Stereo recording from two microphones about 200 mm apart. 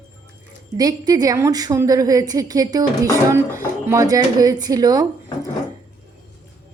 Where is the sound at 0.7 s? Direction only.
20° right (ahead or behind).